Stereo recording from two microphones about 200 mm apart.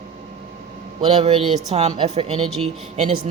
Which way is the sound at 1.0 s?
30° right (ahead or behind).